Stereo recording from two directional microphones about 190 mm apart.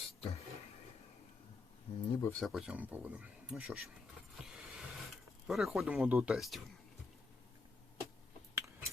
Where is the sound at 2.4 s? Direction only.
Centre (ahead or behind).